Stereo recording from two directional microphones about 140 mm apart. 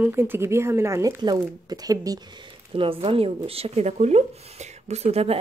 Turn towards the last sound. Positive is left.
turn(degrees=-45)  # may be behind; listen again after turning